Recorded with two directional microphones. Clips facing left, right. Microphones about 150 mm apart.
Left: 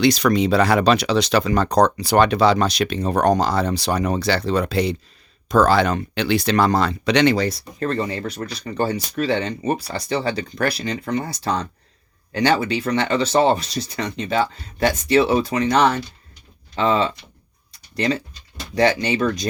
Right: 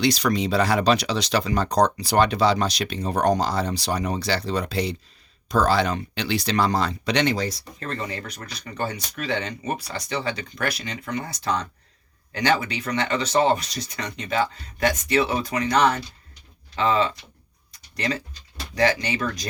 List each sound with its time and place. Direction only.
0.0 s speech: 55° left (ahead or behind)
7.8 s speech: 35° left (ahead or behind)